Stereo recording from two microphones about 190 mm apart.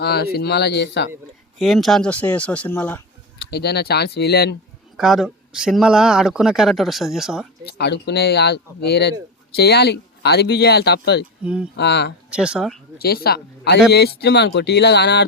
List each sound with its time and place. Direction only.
0.0 s speech: 55° left (ahead or behind)
1.5 s speech: centre (ahead or behind)
3.5 s speech: 55° left (ahead or behind)
4.9 s speech: centre (ahead or behind)
7.7 s speech: 60° left (ahead or behind)
11.4 s speech: 5° right (ahead or behind)
11.8 s speech: 65° left (ahead or behind)
12.3 s speech: 5° right (ahead or behind)
13.0 s speech: 55° left (ahead or behind)